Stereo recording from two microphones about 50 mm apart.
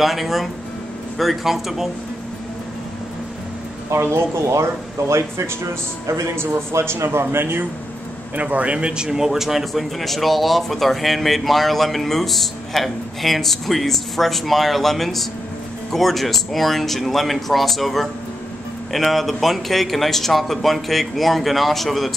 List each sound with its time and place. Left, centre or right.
0.0 s a man's voice: centre
4.0 s speech: right
6.4 s speech: right
8.4 s a man's voice: right; by 22.1 s centre